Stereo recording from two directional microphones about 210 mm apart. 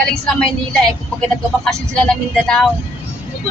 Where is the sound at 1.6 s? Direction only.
5° left (ahead or behind).